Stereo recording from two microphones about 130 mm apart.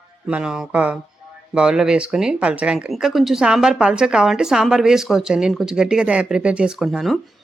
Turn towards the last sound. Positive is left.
turn(degrees=0)  # may be behind; listen again after turning